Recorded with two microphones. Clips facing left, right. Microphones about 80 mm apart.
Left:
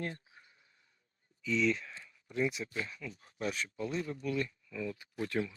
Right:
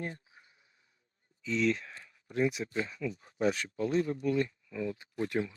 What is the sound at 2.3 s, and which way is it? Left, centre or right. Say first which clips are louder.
Speech: right 3 dB; right.